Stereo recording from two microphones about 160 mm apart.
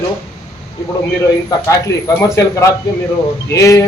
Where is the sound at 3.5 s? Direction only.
20° left (ahead or behind).